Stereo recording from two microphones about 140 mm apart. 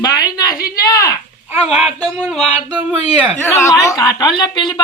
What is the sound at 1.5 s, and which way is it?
Speech, 5° right (ahead or behind).